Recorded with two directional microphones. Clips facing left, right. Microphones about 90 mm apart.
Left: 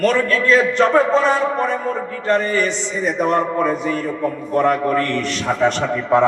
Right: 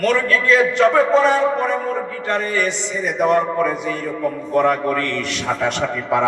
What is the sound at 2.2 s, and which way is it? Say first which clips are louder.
A man's voice: left 4 dB; 40° left (ahead or behind).